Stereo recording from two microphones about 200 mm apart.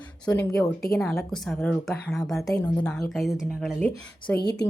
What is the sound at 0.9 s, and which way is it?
Speech, 5° left (ahead or behind).